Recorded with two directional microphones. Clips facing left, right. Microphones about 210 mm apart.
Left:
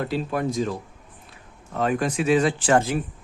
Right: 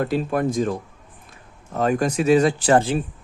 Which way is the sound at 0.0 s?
50° right (ahead or behind).